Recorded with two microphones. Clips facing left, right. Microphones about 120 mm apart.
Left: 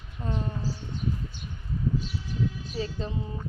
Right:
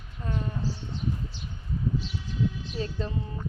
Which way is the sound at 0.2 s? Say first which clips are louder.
Left 1 dB; 25° left (ahead or behind).